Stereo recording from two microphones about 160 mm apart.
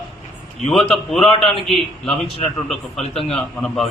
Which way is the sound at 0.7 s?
35° left (ahead or behind).